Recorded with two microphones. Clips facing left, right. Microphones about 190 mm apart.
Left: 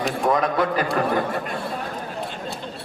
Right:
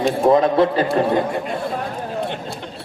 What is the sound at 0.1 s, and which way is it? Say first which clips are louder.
A man's voice: right 7 dB; 25° right (ahead or behind).